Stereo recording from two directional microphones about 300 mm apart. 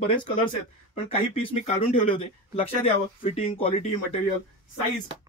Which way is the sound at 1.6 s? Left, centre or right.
Centre.